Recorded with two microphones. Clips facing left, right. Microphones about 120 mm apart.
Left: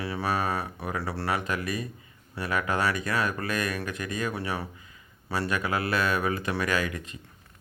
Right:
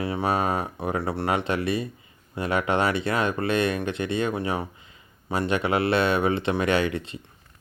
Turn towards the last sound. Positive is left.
turn(degrees=-30)  # may be behind; listen again after turning